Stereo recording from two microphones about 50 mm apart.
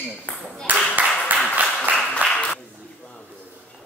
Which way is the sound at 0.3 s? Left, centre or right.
Left.